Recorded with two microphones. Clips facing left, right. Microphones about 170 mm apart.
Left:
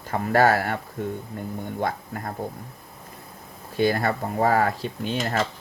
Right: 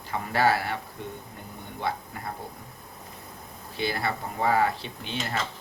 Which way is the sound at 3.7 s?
45° left (ahead or behind).